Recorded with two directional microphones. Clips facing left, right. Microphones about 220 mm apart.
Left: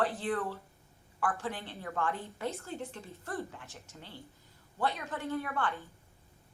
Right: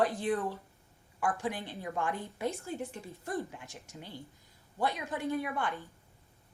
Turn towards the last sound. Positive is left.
turn(degrees=-15)  # may be behind; listen again after turning